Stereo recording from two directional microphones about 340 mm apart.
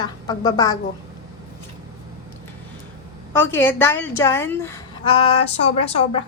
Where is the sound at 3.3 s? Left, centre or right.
Centre.